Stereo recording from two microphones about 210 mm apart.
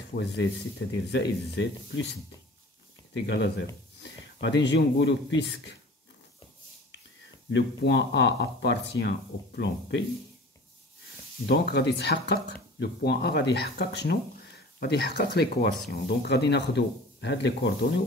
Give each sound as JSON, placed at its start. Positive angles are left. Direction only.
{"t": 0.1, "sound": "speech", "side_deg": 55}
{"t": 3.3, "sound": "speech", "side_deg": 55}
{"t": 7.5, "sound": "speech", "side_deg": 55}
{"t": 11.4, "sound": "speech", "side_deg": 50}